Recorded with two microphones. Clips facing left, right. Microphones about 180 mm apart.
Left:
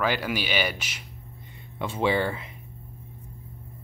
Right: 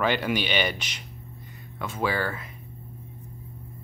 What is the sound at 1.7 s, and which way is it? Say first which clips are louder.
Speech: left 3 dB; 25° left (ahead or behind).